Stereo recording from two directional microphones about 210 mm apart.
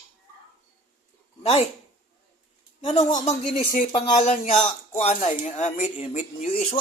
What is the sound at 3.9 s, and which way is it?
Speech, 30° left (ahead or behind).